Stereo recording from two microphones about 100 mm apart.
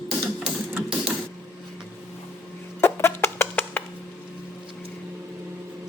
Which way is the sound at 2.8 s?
25° left (ahead or behind).